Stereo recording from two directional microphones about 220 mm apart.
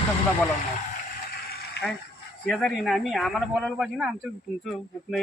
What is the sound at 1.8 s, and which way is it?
Chicken, 50° left (ahead or behind).